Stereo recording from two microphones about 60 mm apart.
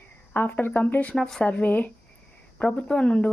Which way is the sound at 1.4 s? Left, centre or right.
Left.